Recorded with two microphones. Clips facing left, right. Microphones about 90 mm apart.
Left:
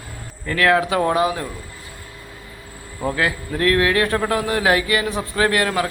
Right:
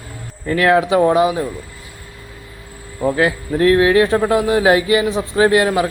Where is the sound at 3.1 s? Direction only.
25° right (ahead or behind).